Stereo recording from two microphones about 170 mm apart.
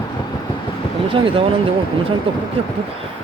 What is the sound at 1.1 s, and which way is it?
Speech, 30° right (ahead or behind).